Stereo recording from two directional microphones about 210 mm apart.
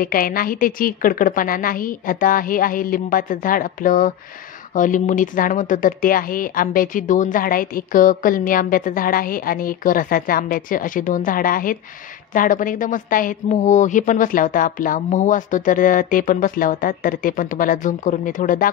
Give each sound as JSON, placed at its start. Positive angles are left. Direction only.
{"t": 0.0, "sound": "speech", "side_deg": 45}